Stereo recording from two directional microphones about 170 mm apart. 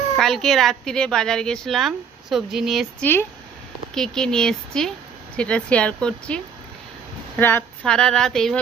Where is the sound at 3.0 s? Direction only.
10° left (ahead or behind).